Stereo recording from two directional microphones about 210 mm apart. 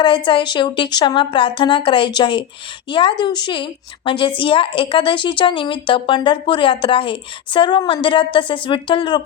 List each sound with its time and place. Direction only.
0.3 s a woman's voice: 25° left (ahead or behind)